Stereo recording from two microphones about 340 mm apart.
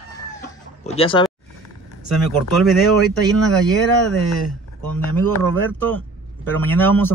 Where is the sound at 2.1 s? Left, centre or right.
Centre.